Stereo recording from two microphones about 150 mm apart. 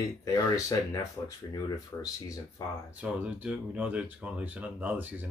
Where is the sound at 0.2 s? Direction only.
25° left (ahead or behind).